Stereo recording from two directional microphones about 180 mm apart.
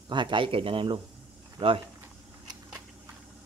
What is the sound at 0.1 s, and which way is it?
Speech, 25° right (ahead or behind).